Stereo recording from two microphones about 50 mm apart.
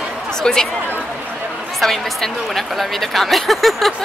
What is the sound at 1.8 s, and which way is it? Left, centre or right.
A woman's voice, centre.